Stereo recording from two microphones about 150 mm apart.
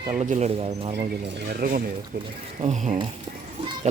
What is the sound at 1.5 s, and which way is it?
Speech, 90° right.